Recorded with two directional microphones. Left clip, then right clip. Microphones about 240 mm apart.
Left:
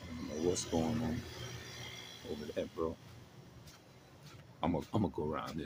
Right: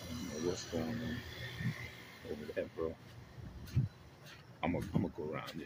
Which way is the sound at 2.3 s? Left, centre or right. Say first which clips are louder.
Even; left.